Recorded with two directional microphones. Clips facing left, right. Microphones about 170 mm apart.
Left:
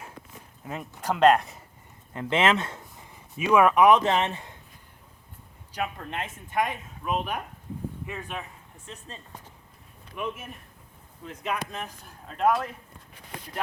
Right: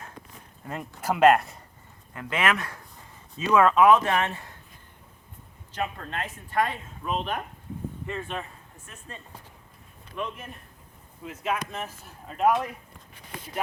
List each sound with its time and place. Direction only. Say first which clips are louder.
0.6 s speech: right 1 dB; centre (ahead or behind)
2.1 s speech: left 3 dB; 25° left (ahead or behind)
3.0 s speech: left 1 dB; 15° left (ahead or behind)
5.7 s speech: even; 10° left (ahead or behind)
8.9 s speech: left 7 dB; 20° left (ahead or behind)
10.2 s speech: left 1 dB; 5° left (ahead or behind)